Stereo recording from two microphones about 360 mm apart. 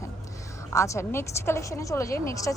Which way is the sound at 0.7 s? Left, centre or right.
Centre.